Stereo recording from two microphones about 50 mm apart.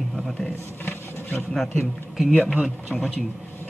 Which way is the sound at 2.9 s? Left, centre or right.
Centre.